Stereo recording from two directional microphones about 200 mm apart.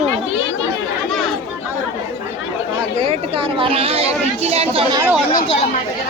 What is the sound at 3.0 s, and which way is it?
Speech, 30° right (ahead or behind).